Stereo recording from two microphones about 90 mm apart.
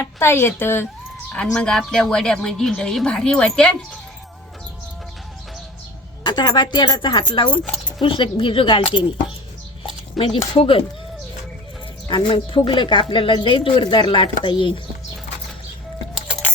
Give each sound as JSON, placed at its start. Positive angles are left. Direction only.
{"t": 0.0, "sound": "speech", "side_deg": 30}
{"t": 1.5, "sound": "a woman's voice", "side_deg": 5}
{"t": 6.2, "sound": "speech", "side_deg": 50}
{"t": 10.2, "sound": "speech", "side_deg": 80}
{"t": 12.0, "sound": "speech", "side_deg": 65}